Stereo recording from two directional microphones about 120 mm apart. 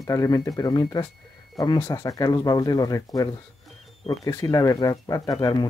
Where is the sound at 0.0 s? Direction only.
30° left (ahead or behind).